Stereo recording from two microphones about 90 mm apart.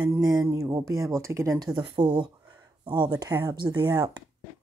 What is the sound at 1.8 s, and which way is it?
Speech, 60° right (ahead or behind).